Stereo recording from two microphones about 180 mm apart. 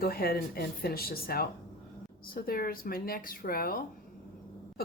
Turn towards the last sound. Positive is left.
turn(degrees=55)  # may be behind; listen again after turning